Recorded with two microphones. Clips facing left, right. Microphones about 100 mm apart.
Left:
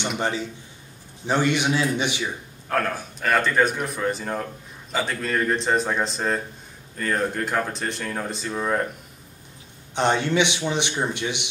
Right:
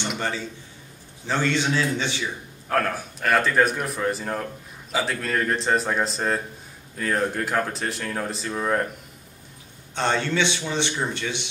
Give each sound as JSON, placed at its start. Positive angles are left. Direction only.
{"t": 0.2, "sound": "speech", "side_deg": 15}
{"t": 2.7, "sound": "speech", "side_deg": 0}
{"t": 9.9, "sound": "speech", "side_deg": 15}